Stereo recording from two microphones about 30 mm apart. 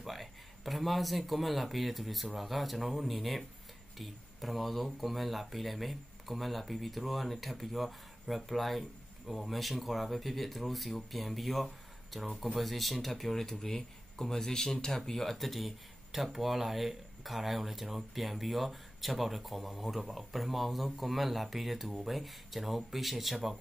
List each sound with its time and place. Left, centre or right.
0.0 s speech: centre
13.5 s speech: centre